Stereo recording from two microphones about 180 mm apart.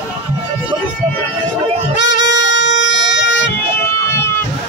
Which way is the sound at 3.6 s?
15° left (ahead or behind).